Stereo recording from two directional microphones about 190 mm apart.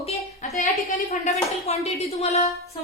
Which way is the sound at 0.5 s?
45° left (ahead or behind).